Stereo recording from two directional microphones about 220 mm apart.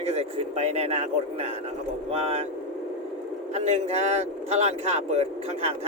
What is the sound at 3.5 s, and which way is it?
Speech, 30° right (ahead or behind).